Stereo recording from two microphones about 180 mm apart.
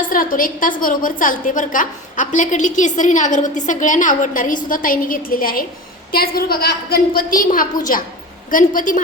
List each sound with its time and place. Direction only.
0.1 s a woman's voice: 50° left (ahead or behind)